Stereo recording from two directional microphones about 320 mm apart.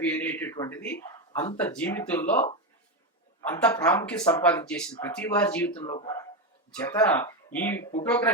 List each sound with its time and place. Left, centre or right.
0.0 s speech: centre
3.5 s speech: centre
5.8 s speech: centre